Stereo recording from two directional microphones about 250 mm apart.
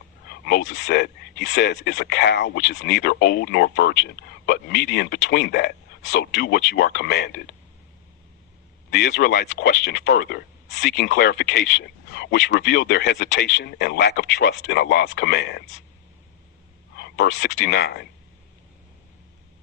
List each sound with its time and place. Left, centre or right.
0.3 s speech: left
8.9 s speech: left
17.0 s speech: left